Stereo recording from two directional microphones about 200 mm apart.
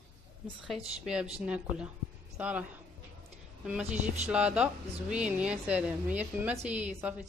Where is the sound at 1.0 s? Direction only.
5° right (ahead or behind).